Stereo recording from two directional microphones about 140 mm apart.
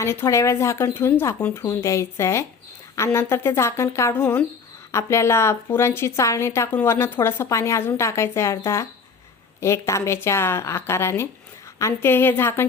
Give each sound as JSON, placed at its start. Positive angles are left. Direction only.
{"t": 0.0, "sound": "a woman's voice", "side_deg": 20}